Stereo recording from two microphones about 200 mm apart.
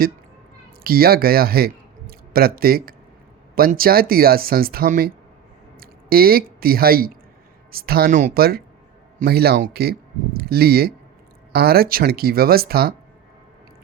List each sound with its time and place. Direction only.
0.9 s speech: 50° right (ahead or behind)